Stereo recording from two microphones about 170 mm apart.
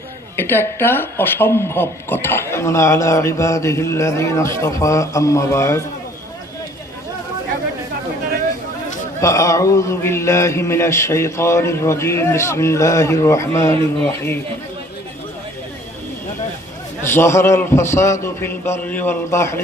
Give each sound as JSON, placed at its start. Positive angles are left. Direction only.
{"t": 0.3, "sound": "speech", "side_deg": 10}
{"t": 9.2, "sound": "speech", "side_deg": 20}
{"t": 17.0, "sound": "speech", "side_deg": 15}